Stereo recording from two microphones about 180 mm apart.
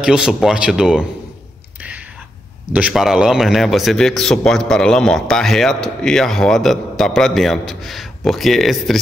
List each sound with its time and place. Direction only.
0.0 s a man's voice: 5° right (ahead or behind)
1.8 s a sound: 10° right (ahead or behind)
2.7 s a man's voice: 5° right (ahead or behind)